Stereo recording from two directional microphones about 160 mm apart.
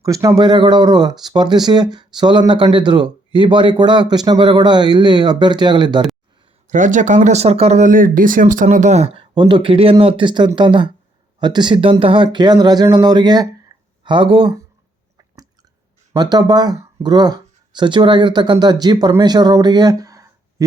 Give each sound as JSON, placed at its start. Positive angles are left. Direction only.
{"t": 0.0, "sound": "speech", "side_deg": -20}
{"t": 6.7, "sound": "speech", "side_deg": -55}
{"t": 16.1, "sound": "speech", "side_deg": -25}